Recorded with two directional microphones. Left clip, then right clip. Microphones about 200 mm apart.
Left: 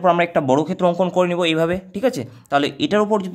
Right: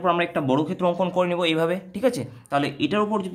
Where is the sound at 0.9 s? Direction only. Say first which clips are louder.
Left 3 dB; 25° left (ahead or behind).